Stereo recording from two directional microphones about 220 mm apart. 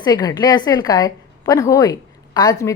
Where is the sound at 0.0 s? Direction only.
20° left (ahead or behind).